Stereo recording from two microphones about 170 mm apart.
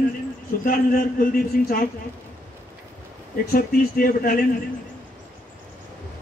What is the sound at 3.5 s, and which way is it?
Speech, 60° left (ahead or behind).